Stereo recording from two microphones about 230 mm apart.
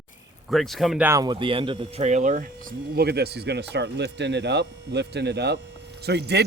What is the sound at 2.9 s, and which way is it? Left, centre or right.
Speech, right.